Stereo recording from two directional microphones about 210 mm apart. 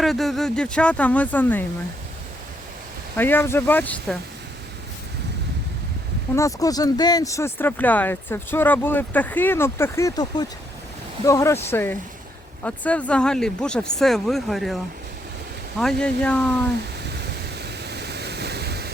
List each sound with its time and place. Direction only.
0.0 s speech: centre (ahead or behind)
3.2 s speech: 10° left (ahead or behind)
6.3 s speech: 15° left (ahead or behind); by 14.8 s centre (ahead or behind)
15.8 s speech: 5° left (ahead or behind)
17.1 s waves: 50° right (ahead or behind)